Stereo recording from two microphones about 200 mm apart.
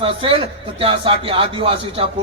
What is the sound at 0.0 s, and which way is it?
A man's voice, 25° right (ahead or behind).